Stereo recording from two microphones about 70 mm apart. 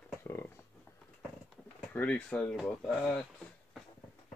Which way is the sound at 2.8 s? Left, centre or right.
Centre.